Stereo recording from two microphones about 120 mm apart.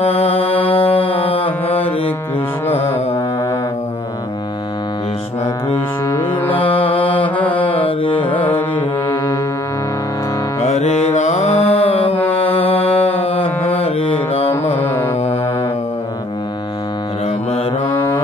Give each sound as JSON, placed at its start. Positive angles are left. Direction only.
{"t": 0.0, "sound": "mantra", "side_deg": 55}
{"t": 2.7, "sound": "music", "side_deg": 15}
{"t": 6.5, "sound": "music", "side_deg": 50}
{"t": 7.2, "sound": "mantra", "side_deg": 15}
{"t": 8.0, "sound": "music", "side_deg": 45}
{"t": 8.4, "sound": "carnatic music", "side_deg": 15}
{"t": 10.6, "sound": "music", "side_deg": 70}
{"t": 14.5, "sound": "carnatic music", "side_deg": 15}